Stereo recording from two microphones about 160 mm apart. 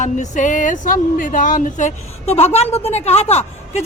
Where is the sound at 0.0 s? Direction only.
50° left (ahead or behind).